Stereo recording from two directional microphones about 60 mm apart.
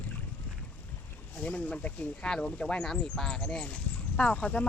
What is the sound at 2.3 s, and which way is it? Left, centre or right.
Speech, centre.